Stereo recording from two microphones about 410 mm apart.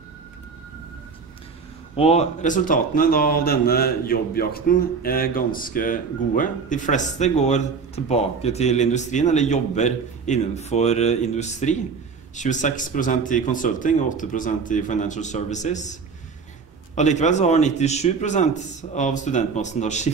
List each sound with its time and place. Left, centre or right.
2.0 s a man's voice: centre